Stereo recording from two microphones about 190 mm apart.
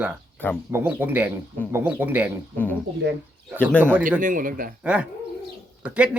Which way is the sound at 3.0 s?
65° right (ahead or behind).